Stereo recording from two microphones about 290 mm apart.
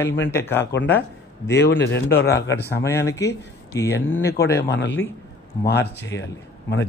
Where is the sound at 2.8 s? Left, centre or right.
Centre.